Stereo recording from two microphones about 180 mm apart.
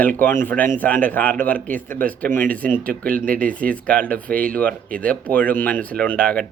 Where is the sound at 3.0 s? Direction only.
50° right (ahead or behind).